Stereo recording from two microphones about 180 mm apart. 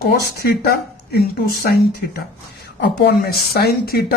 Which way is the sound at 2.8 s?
65° left (ahead or behind).